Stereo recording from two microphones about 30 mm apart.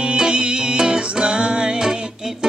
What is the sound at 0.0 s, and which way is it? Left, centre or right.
Music, right.